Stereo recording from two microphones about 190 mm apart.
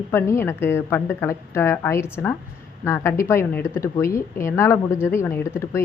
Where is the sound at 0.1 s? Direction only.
10° left (ahead or behind).